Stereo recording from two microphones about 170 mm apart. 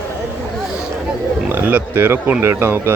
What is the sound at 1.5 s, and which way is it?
Speech, 10° right (ahead or behind).